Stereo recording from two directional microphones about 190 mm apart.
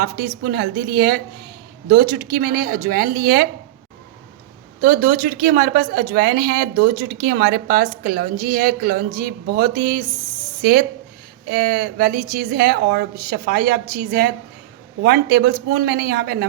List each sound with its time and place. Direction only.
0.0 s speech: 55° right (ahead or behind)
4.8 s speech: 45° right (ahead or behind)